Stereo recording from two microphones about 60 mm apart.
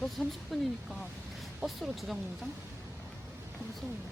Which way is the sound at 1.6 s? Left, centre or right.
Centre.